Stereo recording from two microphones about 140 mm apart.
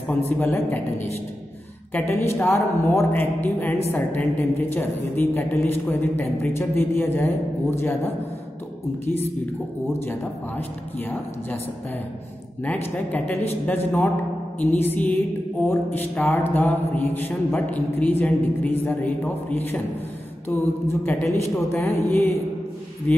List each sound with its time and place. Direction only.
0.4 s a woman's voice: 15° left (ahead or behind)
2.0 s a woman's voice: 15° left (ahead or behind)
12.6 s a woman's voice: 15° left (ahead or behind)
20.4 s a woman's voice: 15° left (ahead or behind)
23.1 s a woman's voice: 10° left (ahead or behind)